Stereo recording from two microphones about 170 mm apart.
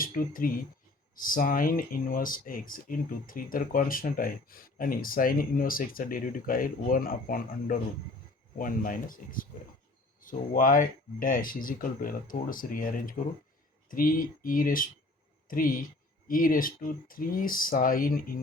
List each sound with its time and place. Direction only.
0.0 s speech: 55° left (ahead or behind)